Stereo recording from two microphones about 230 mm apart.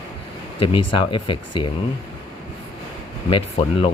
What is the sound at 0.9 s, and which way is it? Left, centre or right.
Speech, left.